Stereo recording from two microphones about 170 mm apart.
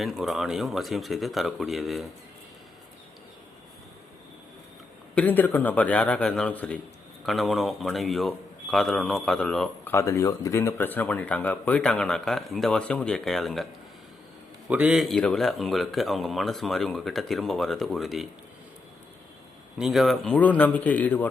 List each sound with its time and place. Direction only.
0.0 s speech: centre (ahead or behind)
5.1 s speech: 10° left (ahead or behind)
9.9 s speech: 15° left (ahead or behind); by 13.7 s centre (ahead or behind)
14.7 s speech: 5° right (ahead or behind)
19.8 s speech: centre (ahead or behind)